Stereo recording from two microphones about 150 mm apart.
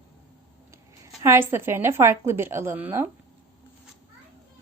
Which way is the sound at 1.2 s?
15° right (ahead or behind).